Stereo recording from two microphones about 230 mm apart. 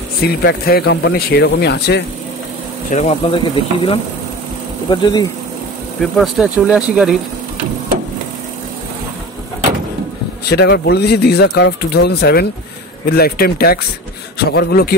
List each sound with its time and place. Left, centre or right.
0.2 s speech: left
2.9 s speech: left
6.1 s speech: centre
10.5 s a man's voice: left